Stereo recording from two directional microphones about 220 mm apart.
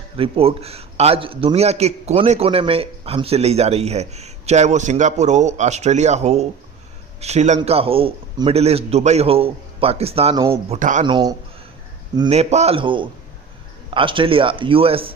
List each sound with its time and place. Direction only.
0.2 s a man's voice: 25° right (ahead or behind)
11.0 s a man's voice: 20° right (ahead or behind)